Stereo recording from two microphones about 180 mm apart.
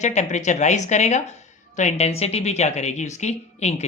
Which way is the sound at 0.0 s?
40° left (ahead or behind).